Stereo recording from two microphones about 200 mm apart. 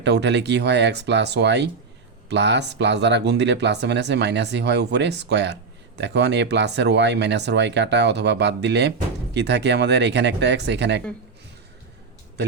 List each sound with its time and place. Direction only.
0.0 s speech: 60° right (ahead or behind)